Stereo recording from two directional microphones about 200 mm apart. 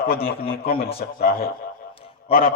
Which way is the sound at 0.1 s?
50° left (ahead or behind).